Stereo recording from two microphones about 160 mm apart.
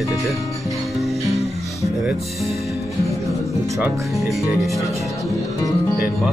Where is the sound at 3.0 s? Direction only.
Centre (ahead or behind).